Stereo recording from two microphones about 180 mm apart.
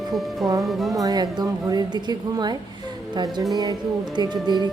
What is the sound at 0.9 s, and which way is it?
A woman's voice, 20° right (ahead or behind).